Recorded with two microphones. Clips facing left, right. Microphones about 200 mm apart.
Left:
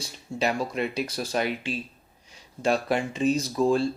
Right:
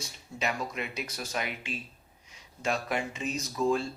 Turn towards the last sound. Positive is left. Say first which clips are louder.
# left 5 dB
turn(degrees=30)  # may be behind; listen again after turning